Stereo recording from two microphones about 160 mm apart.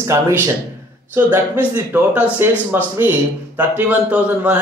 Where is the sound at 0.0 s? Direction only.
15° right (ahead or behind).